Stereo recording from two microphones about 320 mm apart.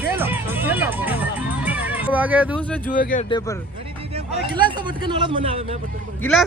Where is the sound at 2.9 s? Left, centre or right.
Left.